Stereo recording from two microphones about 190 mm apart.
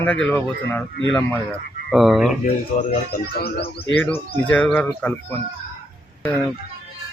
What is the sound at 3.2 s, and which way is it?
Speech, 55° left (ahead or behind).